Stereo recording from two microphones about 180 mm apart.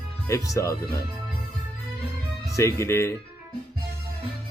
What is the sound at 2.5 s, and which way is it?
Speech, 15° left (ahead or behind).